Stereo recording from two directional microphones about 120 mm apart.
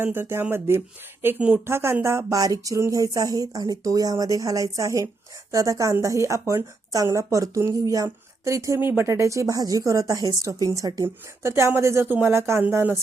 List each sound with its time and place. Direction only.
0.0 s speech: 20° right (ahead or behind)